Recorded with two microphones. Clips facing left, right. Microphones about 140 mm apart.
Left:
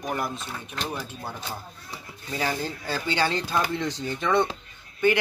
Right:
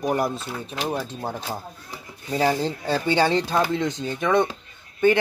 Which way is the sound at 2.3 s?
25° right (ahead or behind).